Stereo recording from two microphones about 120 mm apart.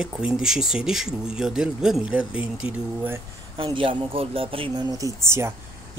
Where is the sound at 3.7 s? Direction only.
50° right (ahead or behind).